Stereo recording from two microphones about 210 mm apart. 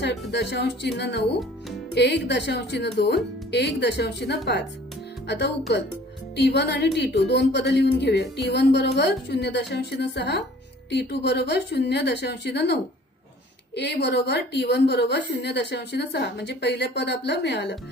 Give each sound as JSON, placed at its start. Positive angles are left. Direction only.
{"t": 0.0, "sound": "speech", "side_deg": 55}